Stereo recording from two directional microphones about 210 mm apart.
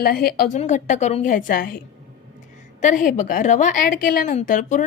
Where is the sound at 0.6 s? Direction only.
35° left (ahead or behind).